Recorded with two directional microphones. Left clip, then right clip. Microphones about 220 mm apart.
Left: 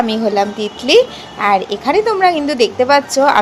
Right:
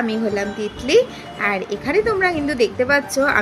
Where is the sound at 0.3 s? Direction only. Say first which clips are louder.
Left 7 dB; 10° right (ahead or behind).